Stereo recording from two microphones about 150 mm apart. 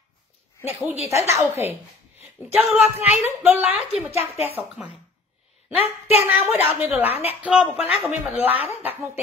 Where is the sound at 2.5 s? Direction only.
10° right (ahead or behind).